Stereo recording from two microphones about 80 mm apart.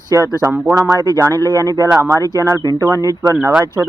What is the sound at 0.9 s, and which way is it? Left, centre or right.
Speech, right.